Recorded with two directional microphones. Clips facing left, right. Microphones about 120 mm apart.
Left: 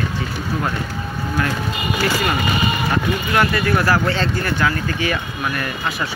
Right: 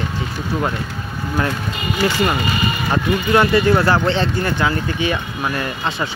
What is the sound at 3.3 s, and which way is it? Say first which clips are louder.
Speech: right 5 dB; 25° right (ahead or behind).